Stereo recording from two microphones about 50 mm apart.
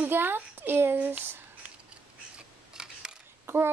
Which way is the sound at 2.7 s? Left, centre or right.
Centre.